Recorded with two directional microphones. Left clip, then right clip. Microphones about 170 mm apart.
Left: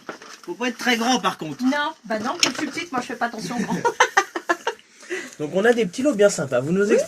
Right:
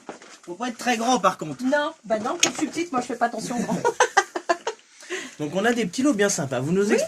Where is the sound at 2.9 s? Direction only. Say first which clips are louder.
Right 2 dB; 15° right (ahead or behind).